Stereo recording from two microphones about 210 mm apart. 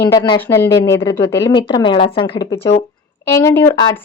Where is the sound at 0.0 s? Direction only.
20° left (ahead or behind).